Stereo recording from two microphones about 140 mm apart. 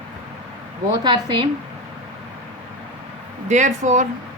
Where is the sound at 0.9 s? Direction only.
30° right (ahead or behind).